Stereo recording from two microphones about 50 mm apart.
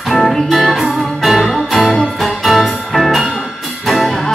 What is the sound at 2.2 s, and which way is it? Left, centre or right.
Music, centre.